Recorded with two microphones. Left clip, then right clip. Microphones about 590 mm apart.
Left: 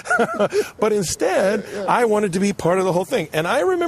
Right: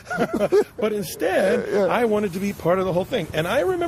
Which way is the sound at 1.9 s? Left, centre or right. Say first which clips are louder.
Left 4 dB; left.